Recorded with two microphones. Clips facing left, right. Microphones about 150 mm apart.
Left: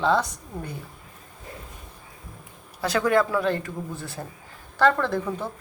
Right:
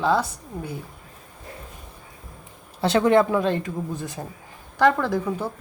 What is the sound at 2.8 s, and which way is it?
Speech, 25° right (ahead or behind).